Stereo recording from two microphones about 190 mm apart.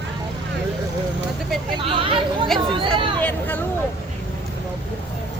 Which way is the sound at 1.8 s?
30° right (ahead or behind).